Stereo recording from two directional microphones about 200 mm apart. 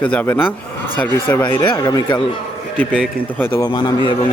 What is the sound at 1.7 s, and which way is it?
Speech, 20° left (ahead or behind).